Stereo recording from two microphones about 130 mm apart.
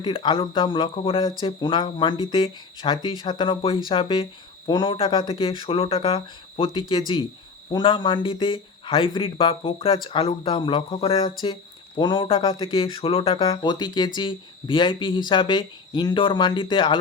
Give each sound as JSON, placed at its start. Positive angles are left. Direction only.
{"t": 0.0, "sound": "a man's voice", "side_deg": 35}